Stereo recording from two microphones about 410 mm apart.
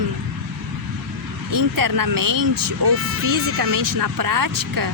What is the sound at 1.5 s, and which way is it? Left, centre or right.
Speech, right.